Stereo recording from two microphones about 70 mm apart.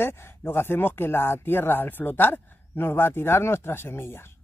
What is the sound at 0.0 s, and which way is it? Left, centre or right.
Speech, left.